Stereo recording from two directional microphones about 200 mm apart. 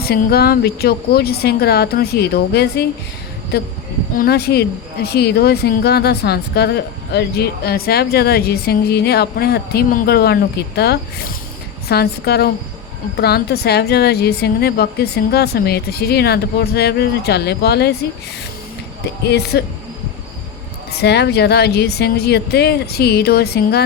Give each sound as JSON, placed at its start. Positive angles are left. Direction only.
{"t": 0.0, "sound": "speech", "side_deg": 50}
{"t": 19.0, "sound": "speech", "side_deg": 55}
{"t": 20.9, "sound": "speech", "side_deg": 55}